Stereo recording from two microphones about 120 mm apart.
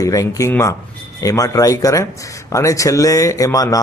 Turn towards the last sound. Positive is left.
turn(degrees=30)  # may be behind; listen again after turning